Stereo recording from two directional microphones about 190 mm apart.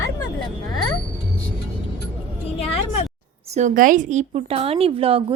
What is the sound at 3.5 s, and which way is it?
A woman's voice, 40° right (ahead or behind).